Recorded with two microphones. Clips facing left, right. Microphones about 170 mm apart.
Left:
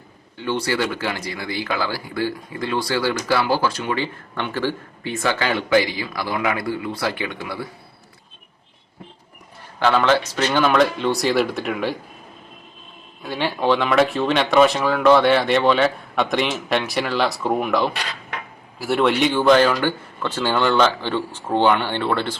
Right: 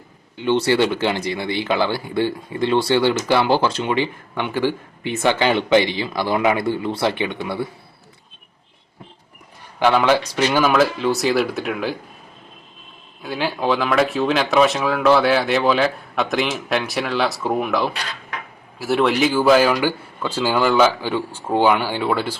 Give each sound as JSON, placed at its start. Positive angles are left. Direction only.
{"t": 0.3, "sound": "speech", "side_deg": -20}
{"t": 9.8, "sound": "speech", "side_deg": -10}
{"t": 13.2, "sound": "speech", "side_deg": 0}